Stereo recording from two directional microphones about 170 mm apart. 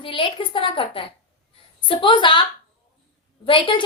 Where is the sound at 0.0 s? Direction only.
30° left (ahead or behind).